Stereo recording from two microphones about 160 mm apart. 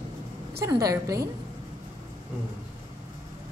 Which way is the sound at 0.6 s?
20° right (ahead or behind).